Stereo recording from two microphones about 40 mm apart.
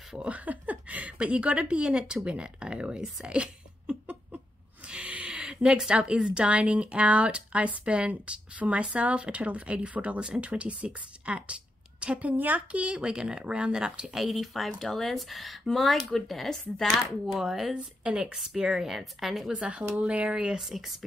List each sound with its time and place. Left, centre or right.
0.2 s speech: right
3.3 s a sound: right
5.9 s speech: right
12.4 s a woman's voice: right
12.7 s speech: right
14.1 s speech: centre
17.4 s a woman's voice: centre
19.5 s speech: right
20.2 s speech: right
20.6 s speech: centre